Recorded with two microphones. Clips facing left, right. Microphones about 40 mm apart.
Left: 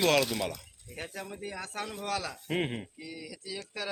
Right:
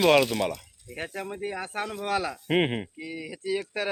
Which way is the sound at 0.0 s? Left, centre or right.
Right.